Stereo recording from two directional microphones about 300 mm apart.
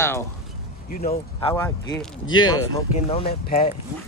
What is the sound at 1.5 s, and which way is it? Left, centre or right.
Speech, centre.